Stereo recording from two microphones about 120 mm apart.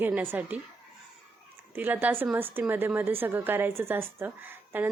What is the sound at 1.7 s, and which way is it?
Speech, 15° right (ahead or behind).